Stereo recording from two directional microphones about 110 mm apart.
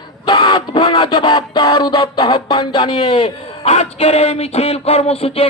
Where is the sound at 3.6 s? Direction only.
75° left (ahead or behind).